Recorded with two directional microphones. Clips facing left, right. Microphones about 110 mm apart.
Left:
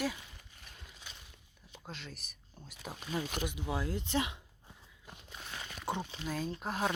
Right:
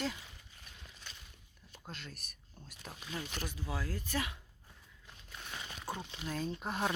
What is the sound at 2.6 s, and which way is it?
Speech, 5° left (ahead or behind).